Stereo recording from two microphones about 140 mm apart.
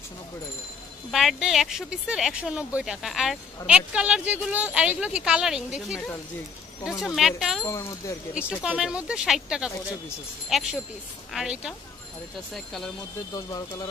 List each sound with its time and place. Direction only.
1.1 s speech: centre (ahead or behind)
7.6 s speech: 20° left (ahead or behind)
8.6 s speech: 5° right (ahead or behind)
13.3 s speech: 25° left (ahead or behind)